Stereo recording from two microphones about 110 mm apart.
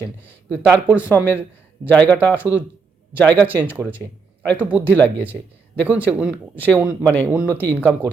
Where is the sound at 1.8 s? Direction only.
15° left (ahead or behind).